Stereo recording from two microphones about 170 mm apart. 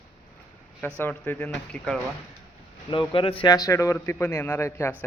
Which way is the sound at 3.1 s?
30° left (ahead or behind).